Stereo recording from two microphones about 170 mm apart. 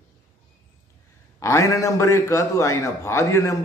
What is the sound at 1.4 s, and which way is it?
A man's voice, 15° left (ahead or behind).